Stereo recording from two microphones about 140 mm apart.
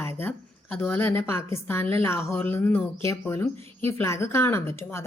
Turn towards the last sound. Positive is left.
turn(degrees=20)  # may be behind; listen again after turning